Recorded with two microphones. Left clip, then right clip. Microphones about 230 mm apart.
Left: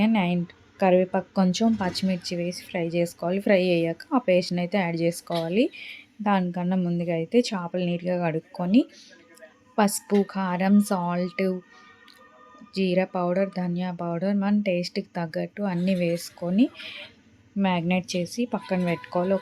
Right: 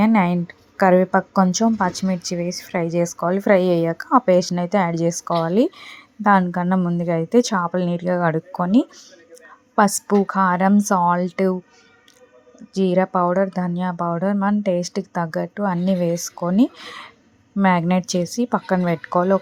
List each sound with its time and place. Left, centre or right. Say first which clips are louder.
0.0 s a woman's voice: right 7 dB; centre
12.7 s a woman's voice: right 6 dB; centre